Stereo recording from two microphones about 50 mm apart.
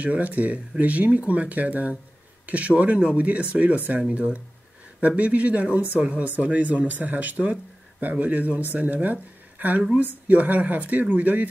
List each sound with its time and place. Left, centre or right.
0.0 s speech: right
5.0 s speech: right